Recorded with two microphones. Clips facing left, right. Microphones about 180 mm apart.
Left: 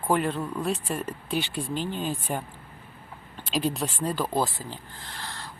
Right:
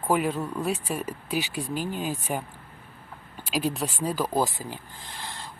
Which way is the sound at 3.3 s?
10° right (ahead or behind).